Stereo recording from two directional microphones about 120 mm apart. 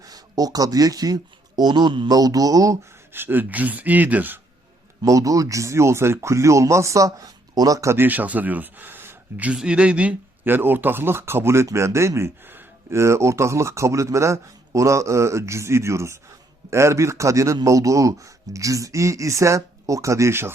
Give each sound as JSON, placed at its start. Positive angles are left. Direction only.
{"t": 0.0, "sound": "speech", "side_deg": -30}
{"t": 5.0, "sound": "speech", "side_deg": -30}